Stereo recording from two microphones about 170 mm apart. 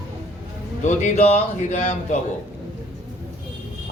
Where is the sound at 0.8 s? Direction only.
45° left (ahead or behind).